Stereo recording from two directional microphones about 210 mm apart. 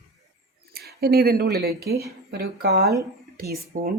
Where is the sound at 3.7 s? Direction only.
40° right (ahead or behind).